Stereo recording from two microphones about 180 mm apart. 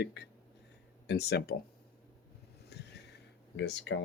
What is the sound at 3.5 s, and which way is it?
Speech, 75° left (ahead or behind).